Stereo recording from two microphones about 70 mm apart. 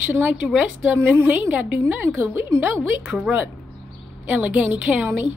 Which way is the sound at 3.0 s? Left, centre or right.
Centre.